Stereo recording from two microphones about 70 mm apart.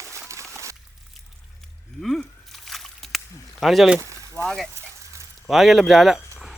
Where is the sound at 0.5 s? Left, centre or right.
Right.